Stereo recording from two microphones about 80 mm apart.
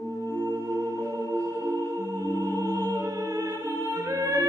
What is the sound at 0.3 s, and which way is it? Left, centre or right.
Music, right.